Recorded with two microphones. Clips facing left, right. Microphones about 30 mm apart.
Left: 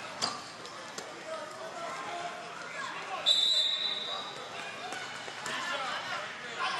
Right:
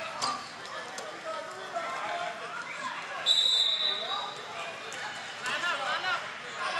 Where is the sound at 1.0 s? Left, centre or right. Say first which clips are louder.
Right 1 dB; right.